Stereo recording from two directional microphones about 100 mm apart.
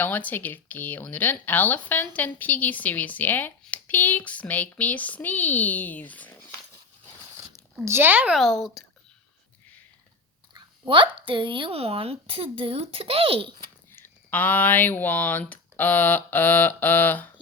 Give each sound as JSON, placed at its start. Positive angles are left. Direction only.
{"t": 0.0, "sound": "speech", "side_deg": 15}
{"t": 7.9, "sound": "speech", "side_deg": -20}
{"t": 8.3, "sound": "speech", "side_deg": 0}
{"t": 10.8, "sound": "speech", "side_deg": -55}
{"t": 13.9, "sound": "speech", "side_deg": 20}